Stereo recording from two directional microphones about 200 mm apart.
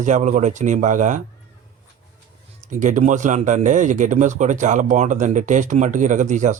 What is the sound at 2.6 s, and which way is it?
Speech, 40° right (ahead or behind).